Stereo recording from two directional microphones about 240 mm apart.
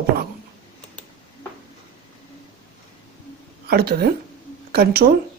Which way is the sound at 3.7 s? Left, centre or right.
Right.